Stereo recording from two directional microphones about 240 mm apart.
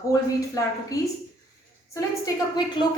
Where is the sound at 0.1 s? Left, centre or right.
Centre.